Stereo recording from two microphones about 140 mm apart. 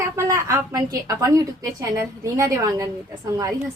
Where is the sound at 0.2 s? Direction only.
20° right (ahead or behind).